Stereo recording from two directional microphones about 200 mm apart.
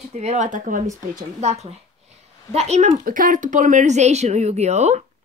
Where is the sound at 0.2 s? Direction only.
35° right (ahead or behind).